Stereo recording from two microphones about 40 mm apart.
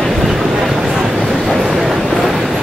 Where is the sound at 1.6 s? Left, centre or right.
Centre.